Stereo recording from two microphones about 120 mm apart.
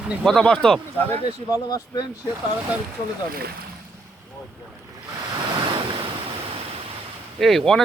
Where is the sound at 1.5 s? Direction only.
30° left (ahead or behind).